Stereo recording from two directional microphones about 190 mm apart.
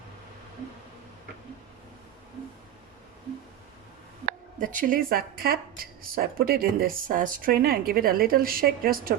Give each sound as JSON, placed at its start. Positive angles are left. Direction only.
{"t": 4.3, "sound": "speech", "side_deg": -45}